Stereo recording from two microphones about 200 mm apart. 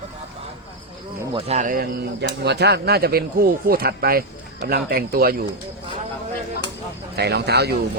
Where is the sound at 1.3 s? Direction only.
30° right (ahead or behind); by 5.4 s 50° right (ahead or behind).